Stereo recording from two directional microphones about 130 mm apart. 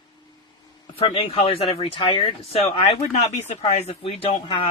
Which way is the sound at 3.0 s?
60° left (ahead or behind).